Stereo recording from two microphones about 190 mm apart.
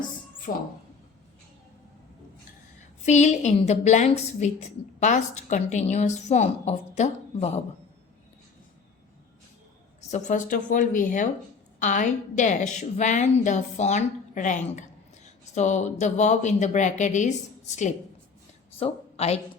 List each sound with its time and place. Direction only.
0.5 s a woman's voice: 50° left (ahead or behind)
3.0 s a woman's voice: 40° left (ahead or behind)
10.1 s a woman's voice: 40° left (ahead or behind)